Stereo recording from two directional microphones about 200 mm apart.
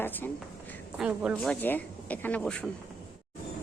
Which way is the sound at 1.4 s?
10° left (ahead or behind).